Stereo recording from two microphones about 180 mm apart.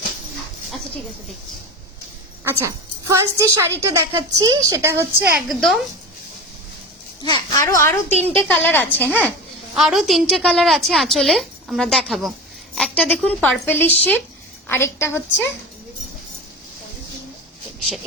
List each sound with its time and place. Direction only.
2.4 s a woman's voice: 15° right (ahead or behind)
5.5 s a woman's voice: centre (ahead or behind)
7.2 s a child's voice: 25° left (ahead or behind)
8.3 s a woman's voice: 10° left (ahead or behind)
9.7 s a woman's voice: centre (ahead or behind); by 15.4 s 15° left (ahead or behind)
17.7 s a sound: centre (ahead or behind)